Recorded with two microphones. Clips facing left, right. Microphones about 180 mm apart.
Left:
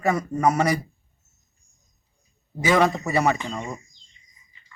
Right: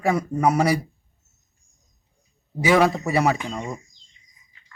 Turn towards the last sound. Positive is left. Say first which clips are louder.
# right 1 dB
turn(degrees=-5)  # may be behind; listen again after turning